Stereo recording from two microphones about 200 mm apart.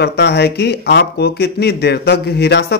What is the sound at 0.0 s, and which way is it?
A man's voice, 55° left (ahead or behind).